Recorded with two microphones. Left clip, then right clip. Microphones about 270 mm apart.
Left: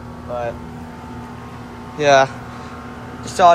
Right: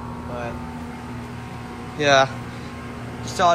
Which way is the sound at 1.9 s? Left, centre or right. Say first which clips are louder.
Left 4 dB; centre.